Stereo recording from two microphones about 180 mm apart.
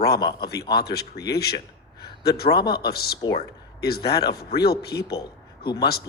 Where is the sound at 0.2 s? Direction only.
25° left (ahead or behind).